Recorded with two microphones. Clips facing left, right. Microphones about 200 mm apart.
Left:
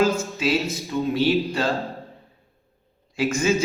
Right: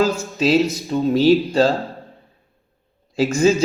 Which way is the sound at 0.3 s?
40° right (ahead or behind).